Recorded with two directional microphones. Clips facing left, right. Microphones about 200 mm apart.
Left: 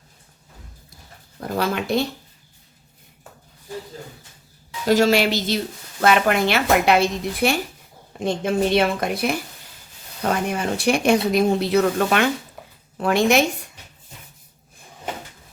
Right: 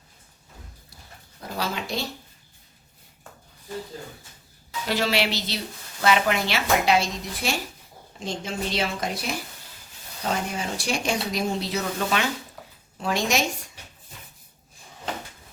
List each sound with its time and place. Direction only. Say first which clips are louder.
1.4 s speech: left 7 dB; 55° left (ahead or behind)
4.9 s a woman's voice: left 8 dB; 45° left (ahead or behind)